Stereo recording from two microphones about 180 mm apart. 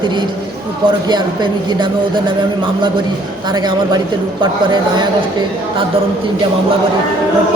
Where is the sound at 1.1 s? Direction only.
25° right (ahead or behind).